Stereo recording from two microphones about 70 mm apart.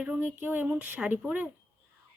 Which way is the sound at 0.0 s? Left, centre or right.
Right.